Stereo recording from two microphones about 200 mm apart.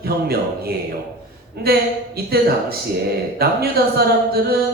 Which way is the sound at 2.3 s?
50° right (ahead or behind).